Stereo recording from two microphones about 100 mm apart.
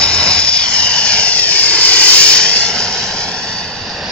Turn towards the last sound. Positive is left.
turn(degrees=5)  # may be behind; listen again after turning